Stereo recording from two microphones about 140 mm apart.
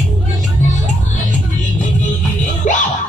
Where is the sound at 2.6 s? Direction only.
60° left (ahead or behind).